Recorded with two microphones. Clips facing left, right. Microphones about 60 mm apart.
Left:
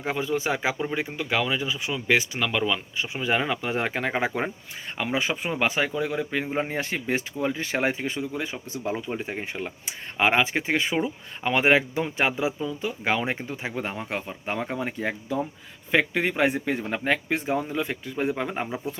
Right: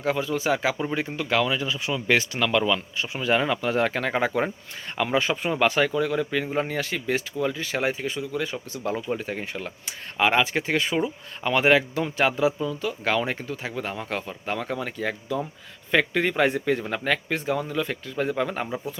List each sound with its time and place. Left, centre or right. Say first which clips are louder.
0.0 s speech: right 2 dB; left
6.7 s speech: right 1 dB; left